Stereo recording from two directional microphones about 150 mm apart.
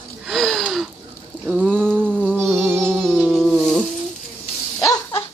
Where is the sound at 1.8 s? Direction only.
10° right (ahead or behind).